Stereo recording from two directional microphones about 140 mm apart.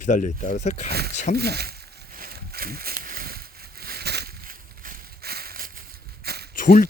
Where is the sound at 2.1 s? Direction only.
90° right.